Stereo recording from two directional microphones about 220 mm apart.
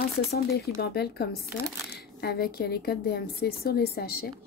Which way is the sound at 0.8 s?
45° left (ahead or behind).